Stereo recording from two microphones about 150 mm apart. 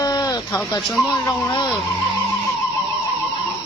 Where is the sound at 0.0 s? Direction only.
25° left (ahead or behind).